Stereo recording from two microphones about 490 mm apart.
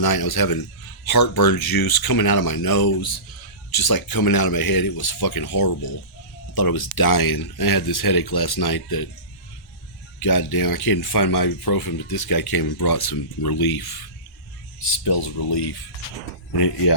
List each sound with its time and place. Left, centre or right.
0.0 s speech: left
10.2 s speech: left
15.0 s speech: left